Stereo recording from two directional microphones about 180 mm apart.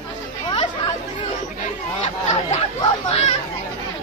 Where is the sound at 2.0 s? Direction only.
40° left (ahead or behind).